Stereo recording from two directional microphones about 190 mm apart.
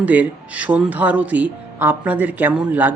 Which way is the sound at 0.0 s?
10° right (ahead or behind).